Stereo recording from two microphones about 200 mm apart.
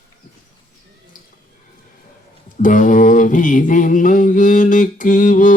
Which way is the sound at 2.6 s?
40° left (ahead or behind).